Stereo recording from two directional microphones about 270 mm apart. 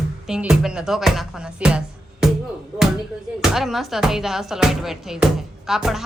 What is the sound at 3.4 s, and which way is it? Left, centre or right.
Speech, centre.